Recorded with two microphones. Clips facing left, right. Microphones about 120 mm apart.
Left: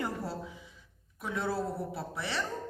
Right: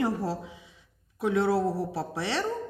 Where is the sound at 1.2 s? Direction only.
80° right.